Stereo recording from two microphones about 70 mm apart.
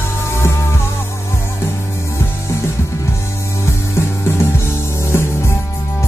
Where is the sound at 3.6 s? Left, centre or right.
Left.